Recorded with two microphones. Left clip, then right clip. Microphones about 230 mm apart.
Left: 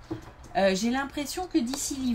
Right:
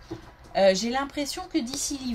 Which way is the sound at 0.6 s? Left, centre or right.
Right.